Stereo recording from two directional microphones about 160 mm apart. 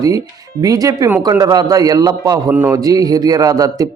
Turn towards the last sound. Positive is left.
turn(degrees=-20)  # may be behind; listen again after turning